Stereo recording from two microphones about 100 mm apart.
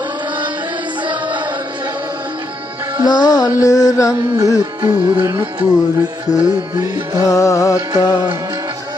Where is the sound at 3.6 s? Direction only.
35° left (ahead or behind).